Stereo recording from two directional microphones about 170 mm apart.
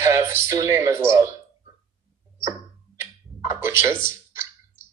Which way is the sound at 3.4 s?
15° right (ahead or behind).